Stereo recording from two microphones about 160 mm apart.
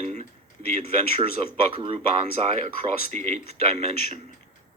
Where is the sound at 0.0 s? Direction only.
45° right (ahead or behind).